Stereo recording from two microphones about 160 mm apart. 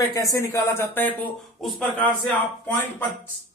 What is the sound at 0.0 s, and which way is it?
Speech, 20° left (ahead or behind).